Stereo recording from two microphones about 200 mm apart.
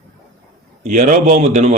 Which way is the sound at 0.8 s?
35° right (ahead or behind).